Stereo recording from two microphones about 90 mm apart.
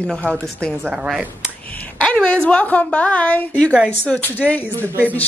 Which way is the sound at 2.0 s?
10° left (ahead or behind).